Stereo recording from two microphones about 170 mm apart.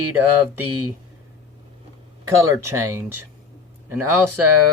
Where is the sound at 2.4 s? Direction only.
15° right (ahead or behind).